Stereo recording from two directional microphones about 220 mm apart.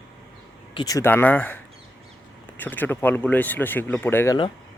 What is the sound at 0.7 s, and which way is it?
Speech, 20° left (ahead or behind).